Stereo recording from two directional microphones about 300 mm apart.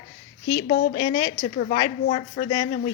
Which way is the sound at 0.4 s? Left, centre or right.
Centre.